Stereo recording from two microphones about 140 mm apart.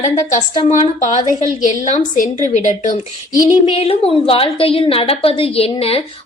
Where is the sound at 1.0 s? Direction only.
65° left (ahead or behind).